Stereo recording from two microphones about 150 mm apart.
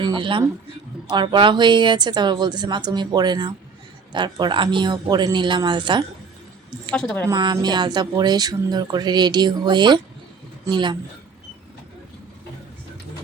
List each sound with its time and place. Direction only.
0.0 s a man's voice: 30° right (ahead or behind)
6.9 s a woman's voice: 5° left (ahead or behind)
7.3 s speech: 30° right (ahead or behind)